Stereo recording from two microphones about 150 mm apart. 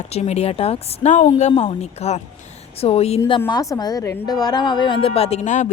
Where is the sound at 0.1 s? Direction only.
45° left (ahead or behind).